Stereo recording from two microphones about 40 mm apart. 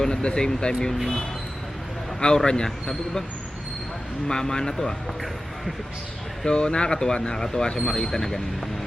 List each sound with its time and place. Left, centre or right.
0.0 s speech: left
2.2 s speech: centre
4.3 s speech: centre
6.4 s speech: left